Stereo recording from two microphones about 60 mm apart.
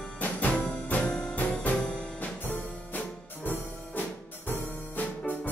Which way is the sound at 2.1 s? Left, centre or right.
Left.